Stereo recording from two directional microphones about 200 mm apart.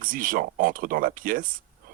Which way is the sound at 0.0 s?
45° right (ahead or behind).